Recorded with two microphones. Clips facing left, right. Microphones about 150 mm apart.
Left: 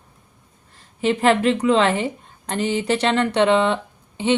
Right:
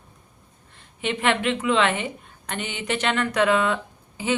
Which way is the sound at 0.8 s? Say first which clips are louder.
Left 7 dB; 35° left (ahead or behind).